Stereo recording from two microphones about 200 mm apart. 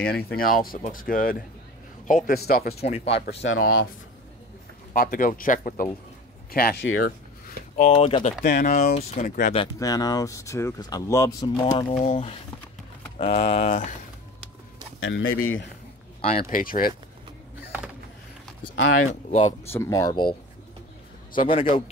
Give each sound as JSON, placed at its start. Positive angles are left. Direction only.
{"t": 0.3, "sound": "speech", "side_deg": 45}
{"t": 2.8, "sound": "speech", "side_deg": 30}
{"t": 3.4, "sound": "speech", "side_deg": 90}
{"t": 4.9, "sound": "speech", "side_deg": 45}
{"t": 7.4, "sound": "speech", "side_deg": 35}
{"t": 9.6, "sound": "speech", "side_deg": 20}
{"t": 15.0, "sound": "speech", "side_deg": 70}
{"t": 16.2, "sound": "speech", "side_deg": 30}
{"t": 16.5, "sound": "speech", "side_deg": 45}
{"t": 19.7, "sound": "speech", "side_deg": 15}
{"t": 21.5, "sound": "speech", "side_deg": 30}